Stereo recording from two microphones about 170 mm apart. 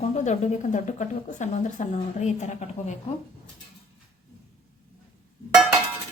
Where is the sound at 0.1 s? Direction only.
45° left (ahead or behind).